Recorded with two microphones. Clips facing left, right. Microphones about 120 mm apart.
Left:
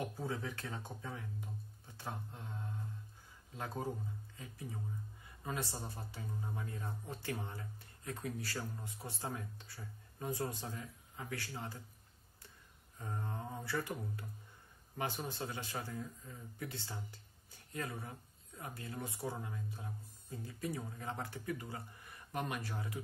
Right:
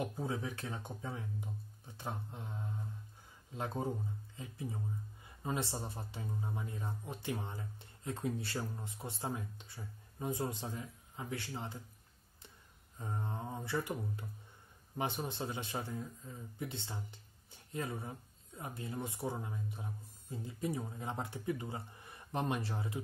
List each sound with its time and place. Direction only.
0.0 s speech: 15° right (ahead or behind)
13.0 s speech: 20° right (ahead or behind)